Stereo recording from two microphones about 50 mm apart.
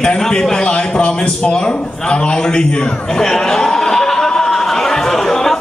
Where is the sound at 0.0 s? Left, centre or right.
Centre.